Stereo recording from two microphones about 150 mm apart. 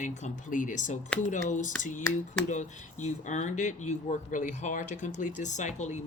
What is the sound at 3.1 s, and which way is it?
Speech, 55° left (ahead or behind).